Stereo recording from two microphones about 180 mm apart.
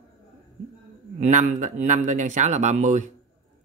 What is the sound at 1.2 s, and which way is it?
Speech, 45° right (ahead or behind).